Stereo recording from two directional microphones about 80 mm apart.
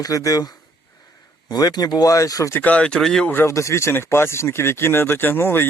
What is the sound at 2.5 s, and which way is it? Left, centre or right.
Speech, centre.